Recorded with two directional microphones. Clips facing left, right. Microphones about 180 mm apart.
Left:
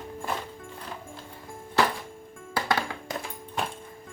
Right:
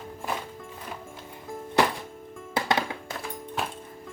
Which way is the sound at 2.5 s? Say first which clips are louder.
Right 1 dB; 20° right (ahead or behind).